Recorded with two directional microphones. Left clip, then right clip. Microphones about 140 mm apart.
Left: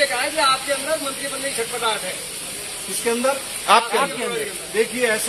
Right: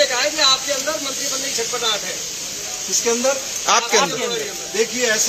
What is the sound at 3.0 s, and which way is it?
Speech, centre (ahead or behind).